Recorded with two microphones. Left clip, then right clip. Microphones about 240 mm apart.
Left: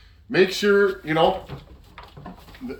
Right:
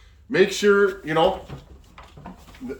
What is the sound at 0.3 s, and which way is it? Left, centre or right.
Speech, centre.